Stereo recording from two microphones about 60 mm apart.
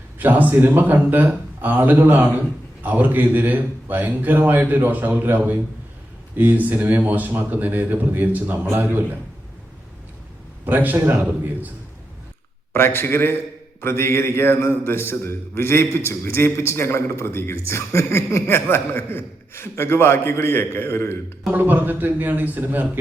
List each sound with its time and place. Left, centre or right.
0.2 s a man's voice: right
10.7 s a man's voice: right
10.9 s a man's voice: right
11.2 s a man's voice: right
12.7 s a man's voice: left
21.5 s a man's voice: right